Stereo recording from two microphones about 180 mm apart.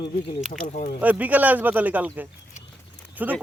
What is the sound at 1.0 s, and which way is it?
Speech, 10° right (ahead or behind).